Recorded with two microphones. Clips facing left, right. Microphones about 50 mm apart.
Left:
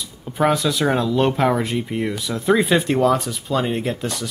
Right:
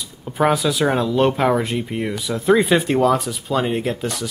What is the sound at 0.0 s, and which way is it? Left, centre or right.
Speech, centre.